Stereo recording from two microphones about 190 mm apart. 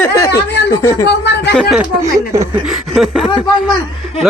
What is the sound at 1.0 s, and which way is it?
Speech, 65° left (ahead or behind).